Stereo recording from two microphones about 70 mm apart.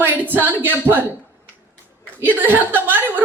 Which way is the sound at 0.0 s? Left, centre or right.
Right.